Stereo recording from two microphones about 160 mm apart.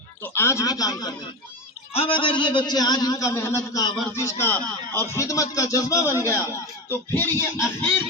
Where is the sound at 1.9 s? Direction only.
35° left (ahead or behind).